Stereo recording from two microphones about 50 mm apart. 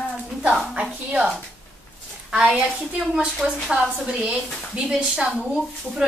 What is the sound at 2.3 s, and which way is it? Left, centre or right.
Speech, centre.